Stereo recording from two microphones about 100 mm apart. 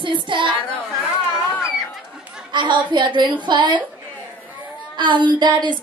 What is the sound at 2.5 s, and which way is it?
A woman's voice, 50° right (ahead or behind).